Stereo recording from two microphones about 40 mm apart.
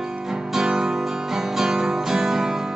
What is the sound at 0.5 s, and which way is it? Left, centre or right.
Guitar, centre.